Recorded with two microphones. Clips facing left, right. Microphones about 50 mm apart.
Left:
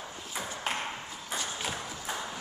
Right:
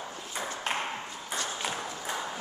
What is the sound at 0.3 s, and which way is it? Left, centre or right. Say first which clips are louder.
Ping: right 2 dB; centre.